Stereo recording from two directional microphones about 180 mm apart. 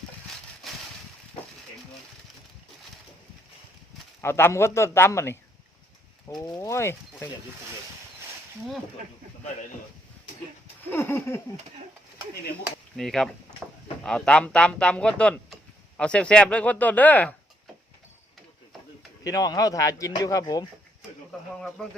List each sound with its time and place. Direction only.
0.3 s a sound: centre (ahead or behind)
4.2 s speech: 15° left (ahead or behind)
6.4 s speech: 20° left (ahead or behind)
10.8 s speech: 10° left (ahead or behind)
13.0 s speech: 5° left (ahead or behind)
19.2 s a man's voice: 20° left (ahead or behind)
21.5 s speech: 5° left (ahead or behind)